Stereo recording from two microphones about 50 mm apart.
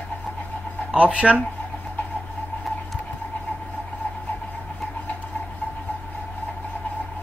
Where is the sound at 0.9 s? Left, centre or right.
Right.